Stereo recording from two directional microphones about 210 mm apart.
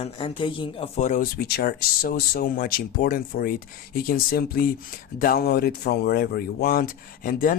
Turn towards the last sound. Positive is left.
turn(degrees=40)  # may be behind; listen again after turning